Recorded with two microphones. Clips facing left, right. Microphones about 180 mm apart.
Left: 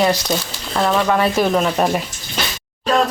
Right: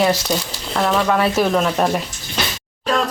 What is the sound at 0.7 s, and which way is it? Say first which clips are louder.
Speech: left 1 dB; 15° left (ahead or behind).